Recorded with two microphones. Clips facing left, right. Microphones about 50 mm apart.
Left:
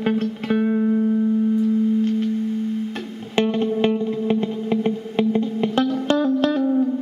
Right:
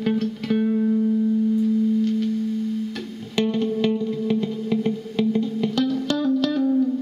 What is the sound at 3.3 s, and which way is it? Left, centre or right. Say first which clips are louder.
Music: left 2 dB; left.